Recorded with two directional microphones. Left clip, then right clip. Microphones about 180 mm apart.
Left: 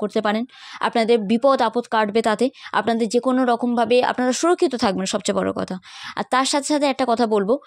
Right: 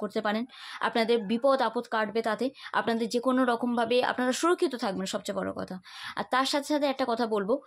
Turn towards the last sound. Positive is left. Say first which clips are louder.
# left 9 dB
turn(degrees=35)  # may be behind; listen again after turning